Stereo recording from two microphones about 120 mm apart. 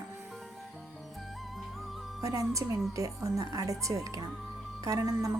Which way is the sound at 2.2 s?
30° right (ahead or behind).